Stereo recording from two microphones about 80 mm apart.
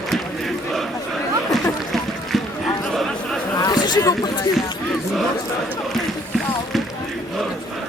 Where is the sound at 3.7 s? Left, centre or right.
Left.